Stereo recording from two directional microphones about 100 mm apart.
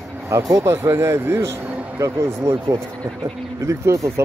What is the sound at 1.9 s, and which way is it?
Speech, 30° right (ahead or behind).